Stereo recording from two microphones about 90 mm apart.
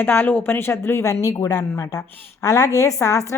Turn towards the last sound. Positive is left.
turn(degrees=35)  # may be behind; listen again after turning